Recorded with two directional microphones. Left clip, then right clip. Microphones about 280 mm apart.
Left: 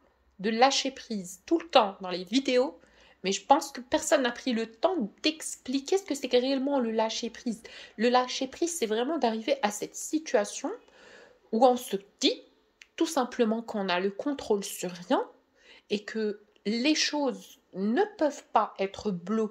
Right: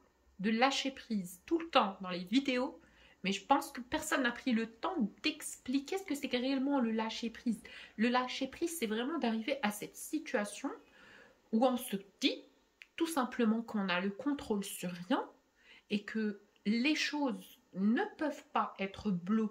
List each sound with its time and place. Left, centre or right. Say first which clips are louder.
0.4 s a woman's voice: left 8 dB; centre